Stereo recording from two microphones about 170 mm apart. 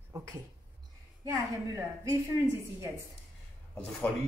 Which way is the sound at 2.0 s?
20° right (ahead or behind).